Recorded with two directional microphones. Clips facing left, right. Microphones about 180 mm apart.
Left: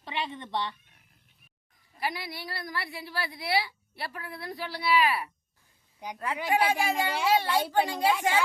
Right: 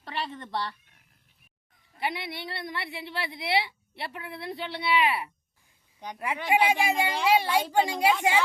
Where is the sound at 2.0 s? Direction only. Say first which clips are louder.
Right 2 dB; 25° right (ahead or behind).